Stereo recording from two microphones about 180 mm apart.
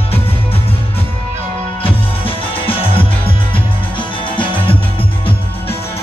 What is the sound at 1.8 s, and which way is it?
Music, 30° left (ahead or behind).